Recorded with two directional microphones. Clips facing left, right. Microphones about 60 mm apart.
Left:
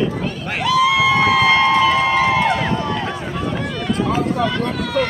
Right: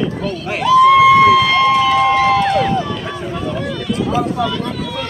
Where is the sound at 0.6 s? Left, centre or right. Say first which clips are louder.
Right 7 dB; centre; by 1.7 s left.